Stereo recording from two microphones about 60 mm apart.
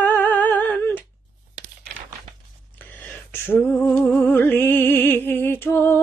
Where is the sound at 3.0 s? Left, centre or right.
Left.